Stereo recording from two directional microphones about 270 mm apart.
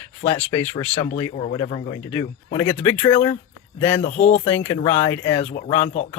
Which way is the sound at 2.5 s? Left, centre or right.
Centre.